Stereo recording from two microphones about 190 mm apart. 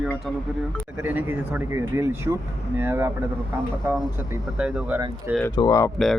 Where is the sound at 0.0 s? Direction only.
Centre (ahead or behind).